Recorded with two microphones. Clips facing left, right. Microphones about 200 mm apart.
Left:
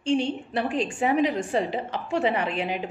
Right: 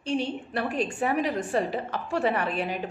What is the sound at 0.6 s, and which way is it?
Speech, 25° left (ahead or behind).